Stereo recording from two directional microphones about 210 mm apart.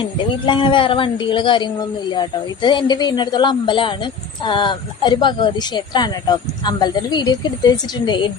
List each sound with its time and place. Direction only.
0.0 s speech: 25° left (ahead or behind)